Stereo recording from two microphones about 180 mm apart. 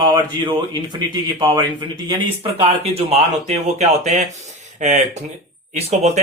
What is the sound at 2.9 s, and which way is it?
Speech, 35° right (ahead or behind).